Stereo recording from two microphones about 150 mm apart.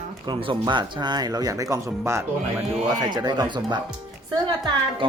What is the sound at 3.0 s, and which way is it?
A woman's voice, 30° right (ahead or behind).